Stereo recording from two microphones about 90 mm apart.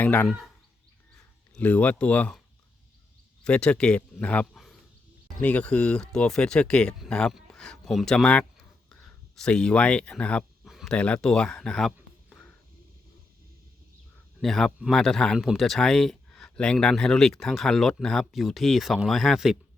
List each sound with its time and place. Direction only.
0.0 s speech: 15° left (ahead or behind)
1.5 s speech: 15° left (ahead or behind)
3.4 s speech: 15° left (ahead or behind)
4.5 s a sound: 5° left (ahead or behind)
5.4 s speech: 15° left (ahead or behind)
8.5 s a sound: 5° left (ahead or behind)
10.7 s a sound: 5° right (ahead or behind)
10.9 s speech: 15° left (ahead or behind)
14.4 s speech: 5° left (ahead or behind)